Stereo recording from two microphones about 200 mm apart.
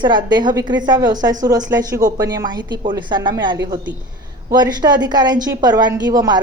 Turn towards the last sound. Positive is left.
turn(degrees=-20)  # may be behind; listen again after turning